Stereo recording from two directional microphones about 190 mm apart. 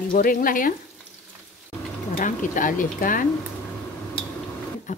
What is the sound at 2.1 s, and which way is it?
Speech, 45° left (ahead or behind).